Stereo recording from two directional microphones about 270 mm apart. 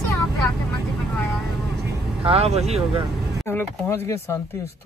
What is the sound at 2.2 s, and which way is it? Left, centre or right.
Speech, right.